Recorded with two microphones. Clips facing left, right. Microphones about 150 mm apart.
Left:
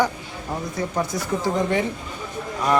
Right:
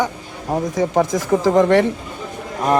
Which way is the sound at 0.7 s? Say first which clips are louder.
Right 8 dB; 90° right.